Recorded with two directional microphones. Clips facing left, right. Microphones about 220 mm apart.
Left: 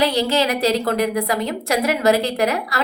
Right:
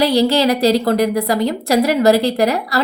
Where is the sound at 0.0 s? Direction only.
35° right (ahead or behind).